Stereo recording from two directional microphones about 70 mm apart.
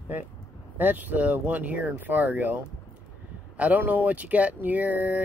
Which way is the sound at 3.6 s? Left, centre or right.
Right.